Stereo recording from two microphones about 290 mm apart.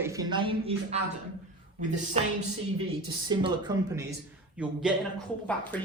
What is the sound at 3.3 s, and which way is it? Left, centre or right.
A woman's voice, centre.